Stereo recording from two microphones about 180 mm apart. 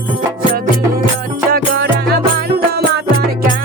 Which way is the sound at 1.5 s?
65° right (ahead or behind).